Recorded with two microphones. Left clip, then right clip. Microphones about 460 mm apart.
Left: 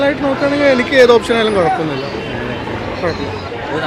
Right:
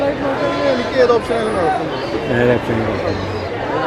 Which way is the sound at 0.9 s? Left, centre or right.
Left.